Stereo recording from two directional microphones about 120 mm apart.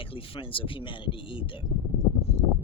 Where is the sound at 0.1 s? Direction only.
45° left (ahead or behind).